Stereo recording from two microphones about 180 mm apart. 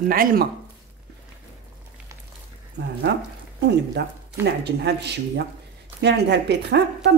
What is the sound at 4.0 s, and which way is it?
A woman's voice, 70° right (ahead or behind).